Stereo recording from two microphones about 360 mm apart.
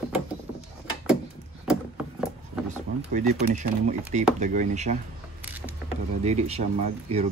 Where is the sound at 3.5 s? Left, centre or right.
Centre.